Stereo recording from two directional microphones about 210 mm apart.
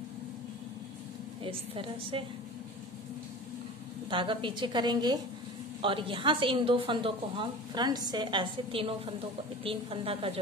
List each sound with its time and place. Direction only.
1.4 s a woman's voice: 25° right (ahead or behind)
4.1 s a woman's voice: 25° right (ahead or behind)